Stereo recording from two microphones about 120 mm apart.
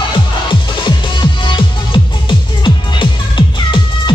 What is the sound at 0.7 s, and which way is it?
Music, 40° left (ahead or behind).